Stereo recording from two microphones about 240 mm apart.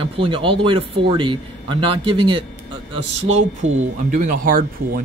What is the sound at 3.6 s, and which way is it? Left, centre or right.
Speech, right.